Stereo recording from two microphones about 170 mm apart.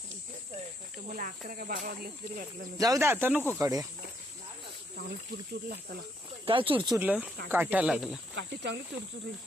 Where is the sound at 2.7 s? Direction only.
20° right (ahead or behind).